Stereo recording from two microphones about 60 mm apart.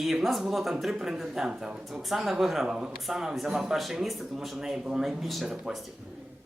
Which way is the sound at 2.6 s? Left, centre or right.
Centre.